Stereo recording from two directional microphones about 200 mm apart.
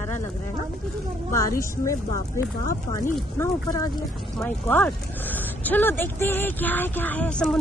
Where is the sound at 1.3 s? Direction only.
15° left (ahead or behind).